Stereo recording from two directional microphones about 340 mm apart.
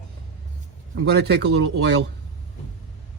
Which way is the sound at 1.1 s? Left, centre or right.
Right.